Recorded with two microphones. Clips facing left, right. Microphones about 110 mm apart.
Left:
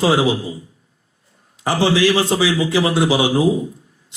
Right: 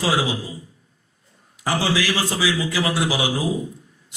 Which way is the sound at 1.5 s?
25° left (ahead or behind).